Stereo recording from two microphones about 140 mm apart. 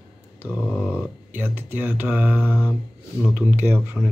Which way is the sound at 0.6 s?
10° left (ahead or behind).